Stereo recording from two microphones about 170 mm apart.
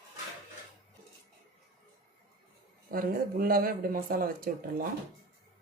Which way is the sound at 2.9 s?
60° right (ahead or behind).